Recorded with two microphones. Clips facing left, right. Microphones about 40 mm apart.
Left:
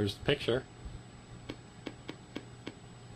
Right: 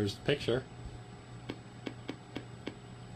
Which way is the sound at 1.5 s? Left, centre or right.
Centre.